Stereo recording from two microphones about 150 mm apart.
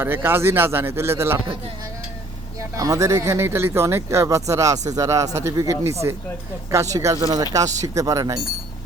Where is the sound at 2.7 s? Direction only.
25° right (ahead or behind).